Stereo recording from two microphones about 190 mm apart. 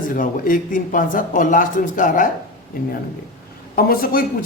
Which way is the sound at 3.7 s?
50° left (ahead or behind).